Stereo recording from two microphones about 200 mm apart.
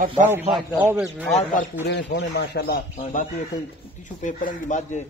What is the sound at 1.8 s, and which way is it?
Speech, 60° left (ahead or behind).